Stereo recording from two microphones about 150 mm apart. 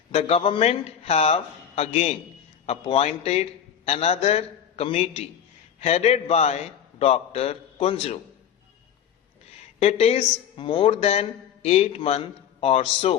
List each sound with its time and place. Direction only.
0.1 s a man's voice: 40° left (ahead or behind)
9.8 s a man's voice: 40° left (ahead or behind)